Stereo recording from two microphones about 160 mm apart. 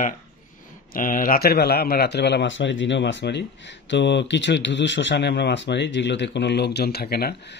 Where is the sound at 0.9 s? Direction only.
60° left (ahead or behind).